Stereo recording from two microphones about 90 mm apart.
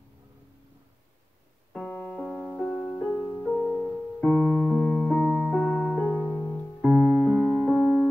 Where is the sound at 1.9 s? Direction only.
15° left (ahead or behind).